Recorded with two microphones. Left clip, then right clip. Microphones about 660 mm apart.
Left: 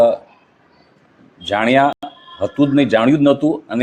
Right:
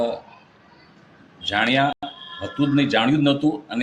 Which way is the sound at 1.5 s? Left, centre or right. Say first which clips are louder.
Left 6 dB; left.